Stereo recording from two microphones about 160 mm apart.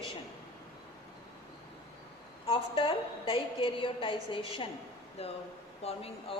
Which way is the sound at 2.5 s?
35° left (ahead or behind).